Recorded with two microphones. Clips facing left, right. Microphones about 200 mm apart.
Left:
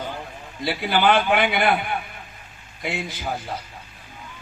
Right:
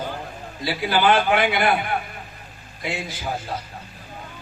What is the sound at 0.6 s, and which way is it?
Speech, 60° left (ahead or behind).